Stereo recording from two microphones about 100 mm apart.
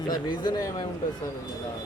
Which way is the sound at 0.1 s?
45° left (ahead or behind).